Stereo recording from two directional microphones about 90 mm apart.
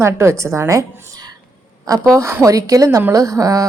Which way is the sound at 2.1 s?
35° right (ahead or behind).